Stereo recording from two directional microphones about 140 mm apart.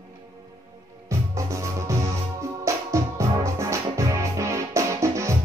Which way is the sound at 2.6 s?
20° right (ahead or behind).